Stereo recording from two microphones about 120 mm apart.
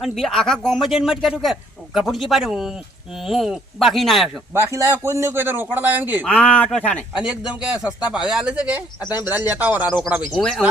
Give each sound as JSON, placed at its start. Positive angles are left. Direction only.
{"t": 0.0, "sound": "speech", "side_deg": 5}
{"t": 4.5, "sound": "a man's voice", "side_deg": -25}
{"t": 6.2, "sound": "speech", "side_deg": 10}
{"t": 7.2, "sound": "a man's voice", "side_deg": -5}
{"t": 10.3, "sound": "speech", "side_deg": 5}